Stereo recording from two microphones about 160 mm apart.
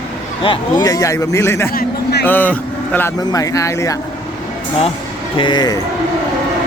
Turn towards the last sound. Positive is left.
turn(degrees=25)  # may be behind; listen again after turning